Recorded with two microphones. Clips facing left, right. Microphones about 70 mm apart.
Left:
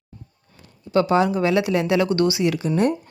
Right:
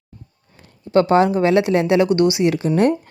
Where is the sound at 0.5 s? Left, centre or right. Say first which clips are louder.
Right 4 dB; right.